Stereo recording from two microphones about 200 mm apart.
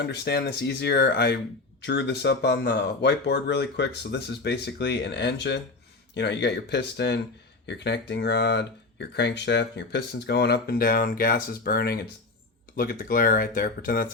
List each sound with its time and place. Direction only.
0.0 s speech: 55° left (ahead or behind)